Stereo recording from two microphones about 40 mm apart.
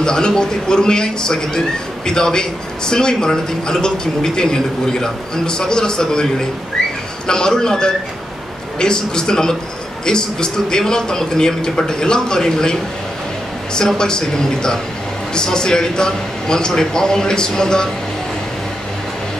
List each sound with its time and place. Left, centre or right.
0.0 s a man's voice: centre
7.2 s a man's voice: centre
13.9 s a man's voice: centre